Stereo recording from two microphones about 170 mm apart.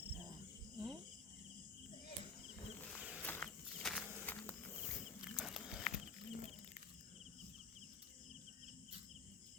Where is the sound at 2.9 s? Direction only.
10° right (ahead or behind).